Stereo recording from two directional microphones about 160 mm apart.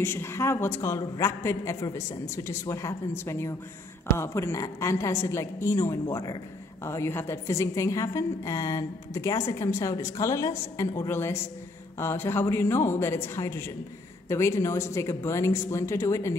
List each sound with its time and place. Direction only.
0.0 s a woman's voice: 15° left (ahead or behind)